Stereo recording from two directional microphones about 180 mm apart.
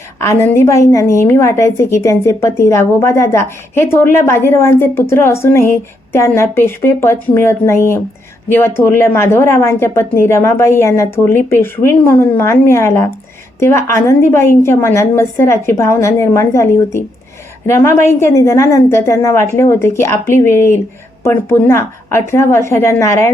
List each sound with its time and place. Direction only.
0.2 s a woman's voice: 15° left (ahead or behind)